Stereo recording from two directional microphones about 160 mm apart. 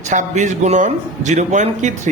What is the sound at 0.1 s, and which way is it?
Speech, 50° right (ahead or behind).